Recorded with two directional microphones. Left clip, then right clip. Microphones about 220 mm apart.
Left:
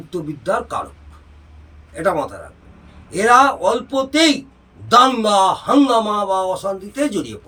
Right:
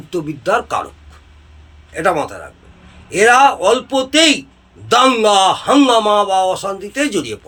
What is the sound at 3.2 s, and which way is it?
A man's voice, 25° right (ahead or behind).